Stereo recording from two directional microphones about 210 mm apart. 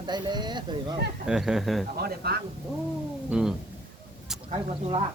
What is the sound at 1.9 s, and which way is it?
Speech, 50° right (ahead or behind).